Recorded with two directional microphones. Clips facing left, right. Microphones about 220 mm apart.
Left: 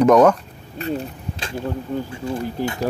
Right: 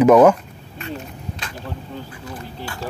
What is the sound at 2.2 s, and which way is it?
Speech, 25° left (ahead or behind).